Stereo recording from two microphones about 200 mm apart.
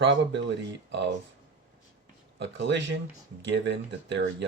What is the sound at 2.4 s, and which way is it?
Speech, 65° right (ahead or behind).